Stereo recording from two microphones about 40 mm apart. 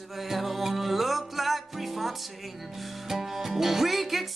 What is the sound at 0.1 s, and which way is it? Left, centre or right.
Music, centre.